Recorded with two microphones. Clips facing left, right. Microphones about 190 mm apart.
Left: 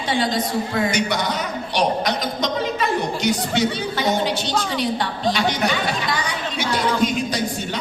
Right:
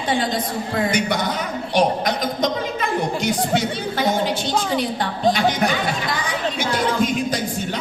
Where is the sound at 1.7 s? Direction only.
50° right (ahead or behind).